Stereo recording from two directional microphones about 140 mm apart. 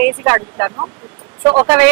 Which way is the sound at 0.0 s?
10° right (ahead or behind).